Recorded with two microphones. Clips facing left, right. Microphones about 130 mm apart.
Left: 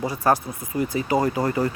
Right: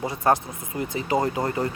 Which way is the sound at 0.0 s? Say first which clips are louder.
Left 1 dB; 25° right (ahead or behind).